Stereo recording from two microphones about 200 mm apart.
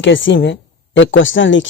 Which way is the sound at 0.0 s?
70° left (ahead or behind).